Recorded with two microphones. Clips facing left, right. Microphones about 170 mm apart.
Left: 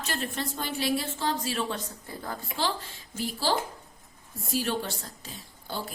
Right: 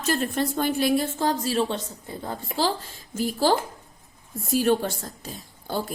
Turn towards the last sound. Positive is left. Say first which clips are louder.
# right 7 dB
turn(degrees=-50)  # may be behind; listen again after turning